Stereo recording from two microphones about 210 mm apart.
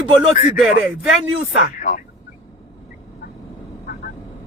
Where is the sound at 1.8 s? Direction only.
35° left (ahead or behind).